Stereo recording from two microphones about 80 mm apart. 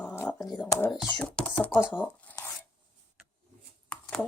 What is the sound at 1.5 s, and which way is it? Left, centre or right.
Speech, left.